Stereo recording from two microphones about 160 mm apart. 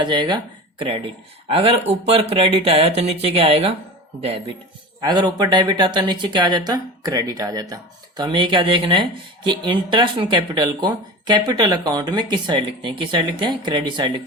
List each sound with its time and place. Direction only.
0.0 s speech: 25° right (ahead or behind)